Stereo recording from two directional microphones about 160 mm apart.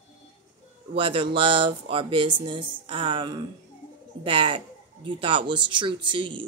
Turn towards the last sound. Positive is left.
turn(degrees=-30)  # may be behind; listen again after turning